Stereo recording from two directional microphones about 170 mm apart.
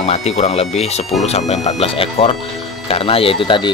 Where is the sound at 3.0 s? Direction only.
35° left (ahead or behind).